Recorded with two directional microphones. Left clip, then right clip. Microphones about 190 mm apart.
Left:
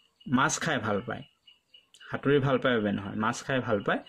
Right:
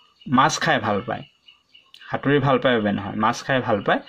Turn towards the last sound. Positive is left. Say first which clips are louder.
# right 8 dB
turn(degrees=25)  # may be behind; listen again after turning